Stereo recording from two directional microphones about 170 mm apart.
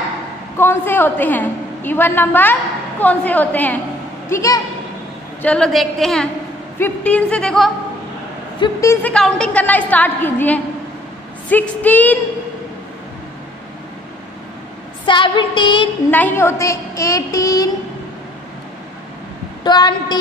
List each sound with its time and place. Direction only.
0.6 s a woman's voice: 15° left (ahead or behind)
5.4 s a woman's voice: 5° left (ahead or behind)
8.8 s a woman's voice: 5° left (ahead or behind)
15.0 s a woman's voice: 30° left (ahead or behind)
16.1 s a woman's voice: 10° left (ahead or behind)
19.6 s a woman's voice: 25° left (ahead or behind)